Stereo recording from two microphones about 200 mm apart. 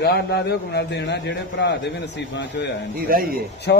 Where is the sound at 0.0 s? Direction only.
55° left (ahead or behind).